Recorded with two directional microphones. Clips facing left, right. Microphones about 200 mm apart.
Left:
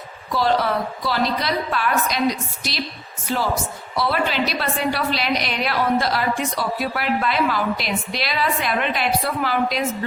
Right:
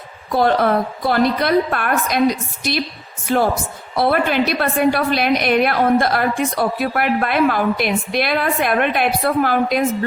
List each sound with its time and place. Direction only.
0.3 s a woman's voice: 55° right (ahead or behind)
3.3 s a woman's voice: 55° right (ahead or behind)